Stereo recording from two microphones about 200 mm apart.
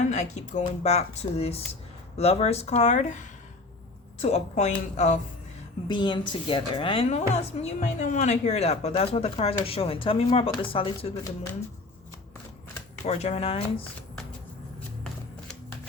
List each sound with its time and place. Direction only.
0.1 s a woman's voice: 35° left (ahead or behind)
5.9 s a woman's voice: 25° left (ahead or behind)
13.1 s a woman's voice: 35° left (ahead or behind)